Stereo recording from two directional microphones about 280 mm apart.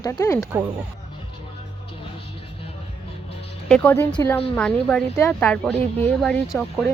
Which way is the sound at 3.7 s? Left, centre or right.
Centre.